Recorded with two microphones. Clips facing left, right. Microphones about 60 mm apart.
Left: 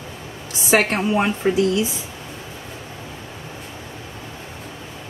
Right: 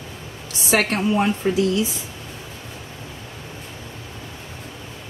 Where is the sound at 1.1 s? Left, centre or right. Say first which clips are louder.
Left 1 dB; left.